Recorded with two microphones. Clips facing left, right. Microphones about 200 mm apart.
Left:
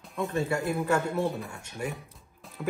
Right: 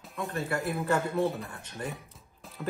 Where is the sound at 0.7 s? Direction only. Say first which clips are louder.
Right 1 dB; centre (ahead or behind).